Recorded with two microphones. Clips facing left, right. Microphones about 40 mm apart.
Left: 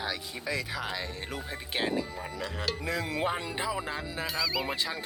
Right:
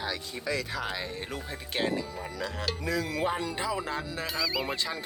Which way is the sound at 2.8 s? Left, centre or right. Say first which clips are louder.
Right 2 dB; left.